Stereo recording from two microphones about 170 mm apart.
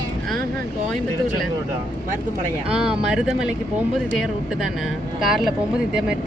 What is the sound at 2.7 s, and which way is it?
Speech, 5° right (ahead or behind).